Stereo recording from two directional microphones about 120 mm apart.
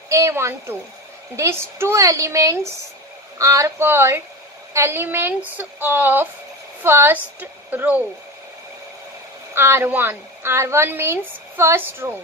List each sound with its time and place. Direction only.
0.1 s a woman's voice: 25° right (ahead or behind)
9.5 s a woman's voice: 20° right (ahead or behind)